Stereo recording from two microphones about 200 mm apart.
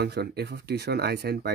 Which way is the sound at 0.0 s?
55° right (ahead or behind).